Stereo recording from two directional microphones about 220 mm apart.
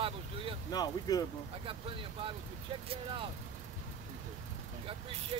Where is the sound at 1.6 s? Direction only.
25° right (ahead or behind).